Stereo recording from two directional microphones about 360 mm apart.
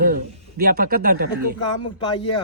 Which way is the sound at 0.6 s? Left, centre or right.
Right.